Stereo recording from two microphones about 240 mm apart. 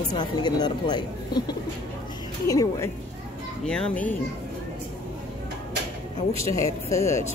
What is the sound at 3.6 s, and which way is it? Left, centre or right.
Speech, centre.